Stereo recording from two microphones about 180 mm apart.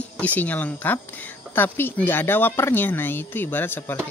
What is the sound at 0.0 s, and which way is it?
Speech, 10° left (ahead or behind).